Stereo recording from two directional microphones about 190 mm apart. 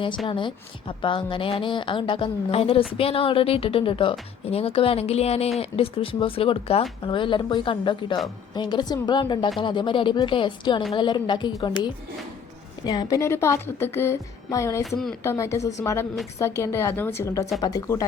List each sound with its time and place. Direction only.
0.3 s a woman's voice: 25° left (ahead or behind)
14.8 s speech: centre (ahead or behind)
15.2 s a woman's voice: 15° left (ahead or behind)